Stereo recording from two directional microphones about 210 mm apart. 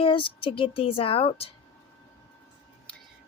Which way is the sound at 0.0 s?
25° left (ahead or behind).